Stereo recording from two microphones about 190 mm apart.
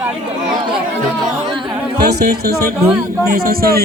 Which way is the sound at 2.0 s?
55° right (ahead or behind).